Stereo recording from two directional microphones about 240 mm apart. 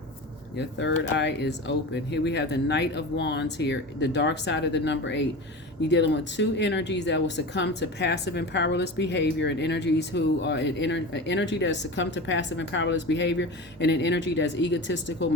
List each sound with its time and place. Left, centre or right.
0.5 s speech: left